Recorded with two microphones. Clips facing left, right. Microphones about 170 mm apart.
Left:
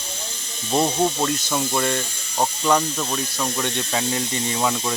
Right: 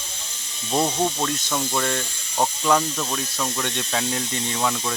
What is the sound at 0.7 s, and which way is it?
Speech, 5° left (ahead or behind).